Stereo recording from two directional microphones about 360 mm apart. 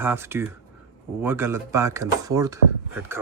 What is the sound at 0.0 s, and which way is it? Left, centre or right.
Speech, centre.